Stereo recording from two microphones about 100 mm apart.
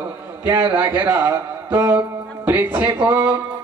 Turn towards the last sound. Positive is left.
turn(degrees=-15)  # may be behind; listen again after turning